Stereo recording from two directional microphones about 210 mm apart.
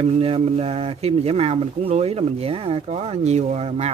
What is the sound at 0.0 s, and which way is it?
Speech, 30° right (ahead or behind).